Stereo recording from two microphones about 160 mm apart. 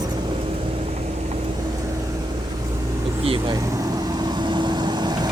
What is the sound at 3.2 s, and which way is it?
Vehicle, 30° right (ahead or behind).